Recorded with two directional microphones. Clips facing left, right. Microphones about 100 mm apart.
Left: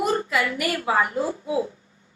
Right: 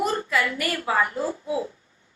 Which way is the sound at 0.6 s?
20° left (ahead or behind).